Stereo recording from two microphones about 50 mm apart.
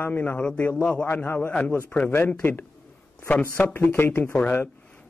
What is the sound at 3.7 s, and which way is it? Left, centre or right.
Speech, left.